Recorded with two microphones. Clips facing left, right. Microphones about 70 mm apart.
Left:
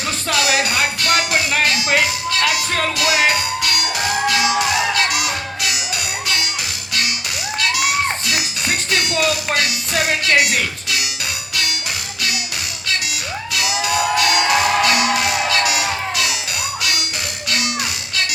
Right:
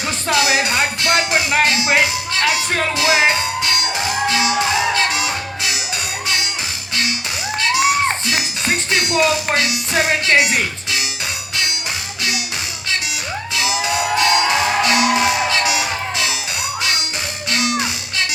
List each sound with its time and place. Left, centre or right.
0.3 s music: right
7.6 s music: right
13.5 s music: right
17.5 s cattle: right